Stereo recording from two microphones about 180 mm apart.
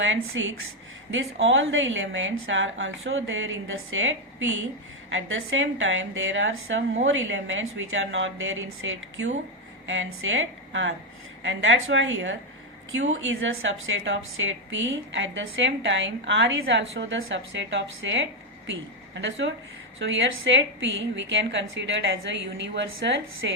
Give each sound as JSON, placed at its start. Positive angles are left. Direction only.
{"t": 0.0, "sound": "a woman's voice", "side_deg": -90}